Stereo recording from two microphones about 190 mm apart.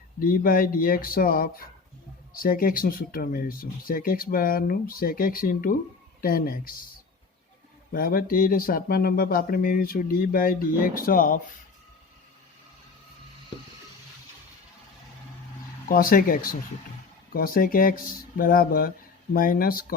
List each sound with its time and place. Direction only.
0.2 s speech: 50° left (ahead or behind)
7.9 s speech: 50° left (ahead or behind)
15.9 s speech: 50° left (ahead or behind)